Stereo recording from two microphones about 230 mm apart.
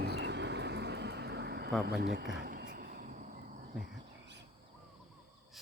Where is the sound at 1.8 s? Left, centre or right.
Right.